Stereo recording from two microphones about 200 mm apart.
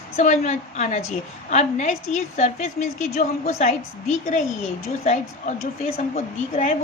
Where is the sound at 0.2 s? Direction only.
35° left (ahead or behind).